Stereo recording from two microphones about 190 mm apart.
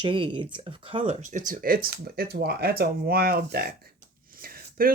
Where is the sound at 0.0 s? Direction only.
25° right (ahead or behind).